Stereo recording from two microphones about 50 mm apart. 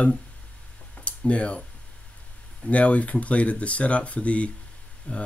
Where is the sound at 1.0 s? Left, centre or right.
Left.